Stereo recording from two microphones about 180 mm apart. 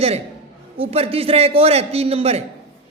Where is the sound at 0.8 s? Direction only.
30° right (ahead or behind).